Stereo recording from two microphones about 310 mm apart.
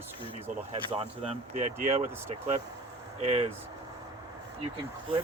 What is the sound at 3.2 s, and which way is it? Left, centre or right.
Speech, right.